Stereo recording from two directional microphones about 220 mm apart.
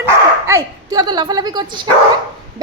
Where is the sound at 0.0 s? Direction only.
15° right (ahead or behind).